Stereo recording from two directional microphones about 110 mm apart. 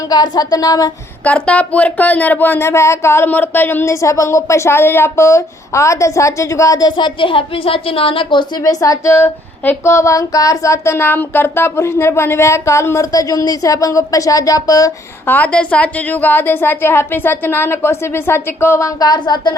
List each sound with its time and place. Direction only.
0.1 s a woman's voice: 40° left (ahead or behind)
1.2 s speech: 10° left (ahead or behind); by 6.9 s 35° left (ahead or behind)
6.9 s a woman's voice: 50° left (ahead or behind)
15.3 s speech: 10° left (ahead or behind); by 19.5 s 40° left (ahead or behind)